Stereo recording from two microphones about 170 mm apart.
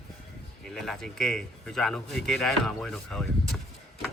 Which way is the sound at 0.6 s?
Centre (ahead or behind).